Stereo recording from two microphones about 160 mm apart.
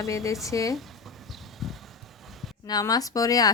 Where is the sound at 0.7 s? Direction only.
Centre (ahead or behind).